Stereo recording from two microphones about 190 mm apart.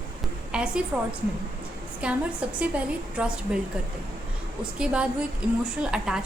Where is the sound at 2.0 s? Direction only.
5° right (ahead or behind).